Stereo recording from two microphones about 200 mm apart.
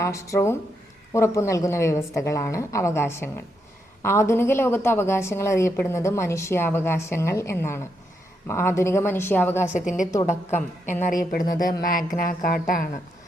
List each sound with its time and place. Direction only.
0.0 s a woman's voice: 15° left (ahead or behind)
11.0 s a woman's voice: 45° left (ahead or behind)